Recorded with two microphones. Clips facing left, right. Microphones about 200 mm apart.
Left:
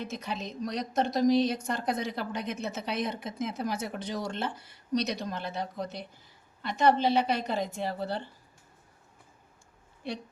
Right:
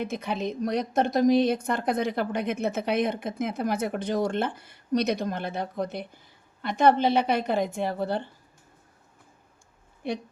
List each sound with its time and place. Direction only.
0.0 s a woman's voice: 55° right (ahead or behind)
10.0 s a woman's voice: 50° right (ahead or behind)